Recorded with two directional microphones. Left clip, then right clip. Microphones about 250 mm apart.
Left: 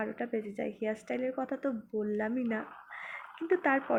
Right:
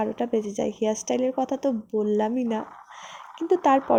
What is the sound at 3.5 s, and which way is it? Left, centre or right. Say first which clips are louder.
Speech: right 9 dB; right.